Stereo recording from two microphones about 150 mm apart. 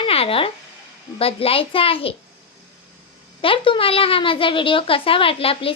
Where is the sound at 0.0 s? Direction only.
40° left (ahead or behind).